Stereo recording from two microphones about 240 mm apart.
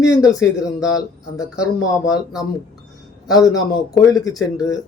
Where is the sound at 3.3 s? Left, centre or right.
Centre.